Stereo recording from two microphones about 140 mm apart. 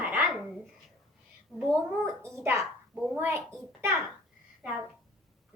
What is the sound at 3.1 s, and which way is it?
Speech, 20° right (ahead or behind).